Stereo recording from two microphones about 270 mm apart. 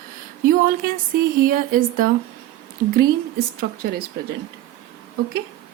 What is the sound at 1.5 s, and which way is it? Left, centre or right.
Speech, right.